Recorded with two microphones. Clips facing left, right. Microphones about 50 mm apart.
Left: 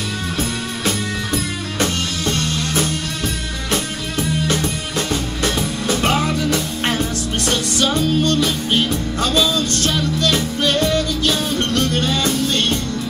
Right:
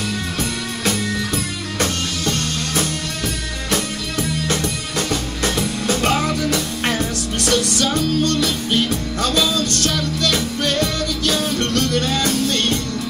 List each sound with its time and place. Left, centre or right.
0.4 s music: left
4.6 s music: left